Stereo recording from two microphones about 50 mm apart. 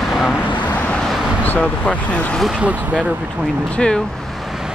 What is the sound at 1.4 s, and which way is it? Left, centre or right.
Speech, left.